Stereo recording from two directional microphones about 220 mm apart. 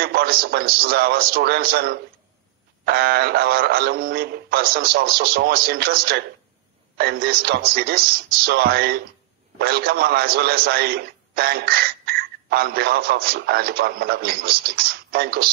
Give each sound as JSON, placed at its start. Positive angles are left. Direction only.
{"t": 0.0, "sound": "a man's voice", "side_deg": -45}